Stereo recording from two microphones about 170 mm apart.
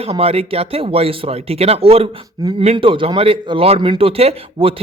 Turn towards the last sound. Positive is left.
turn(degrees=-35)  # may be behind; listen again after turning